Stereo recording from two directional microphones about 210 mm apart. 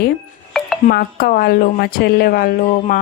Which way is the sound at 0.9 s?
45° left (ahead or behind).